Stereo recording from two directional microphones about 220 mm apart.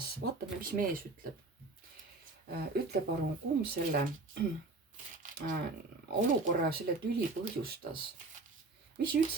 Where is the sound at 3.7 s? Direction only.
45° right (ahead or behind).